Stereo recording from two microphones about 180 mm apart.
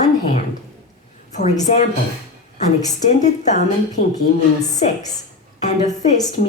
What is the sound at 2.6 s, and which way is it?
A woman's voice, 40° left (ahead or behind).